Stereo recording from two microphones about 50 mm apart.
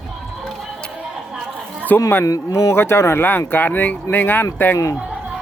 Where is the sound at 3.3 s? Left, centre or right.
Left.